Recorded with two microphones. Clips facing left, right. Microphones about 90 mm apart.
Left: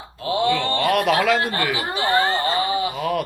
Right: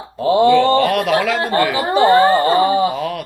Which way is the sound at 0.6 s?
35° right (ahead or behind).